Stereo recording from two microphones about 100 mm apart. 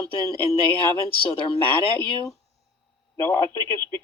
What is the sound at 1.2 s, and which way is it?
Speech, 65° left (ahead or behind).